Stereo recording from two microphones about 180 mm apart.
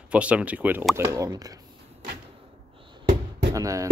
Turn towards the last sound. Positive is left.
turn(degrees=-20)  # may be behind; listen again after turning